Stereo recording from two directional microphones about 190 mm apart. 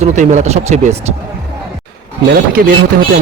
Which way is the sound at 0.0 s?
40° right (ahead or behind).